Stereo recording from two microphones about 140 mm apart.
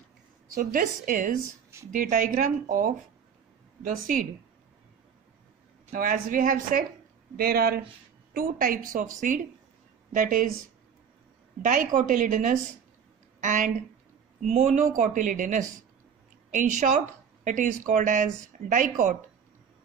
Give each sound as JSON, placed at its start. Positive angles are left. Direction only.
{"t": 0.6, "sound": "a woman's voice", "side_deg": -85}
{"t": 5.9, "sound": "speech", "side_deg": -85}
{"t": 7.3, "sound": "a woman's voice", "side_deg": -90}
{"t": 11.6, "sound": "speech", "side_deg": -70}
{"t": 15.0, "sound": "speech", "side_deg": -70}